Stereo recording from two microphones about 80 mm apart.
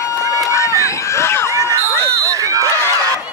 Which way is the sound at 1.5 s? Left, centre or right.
Right.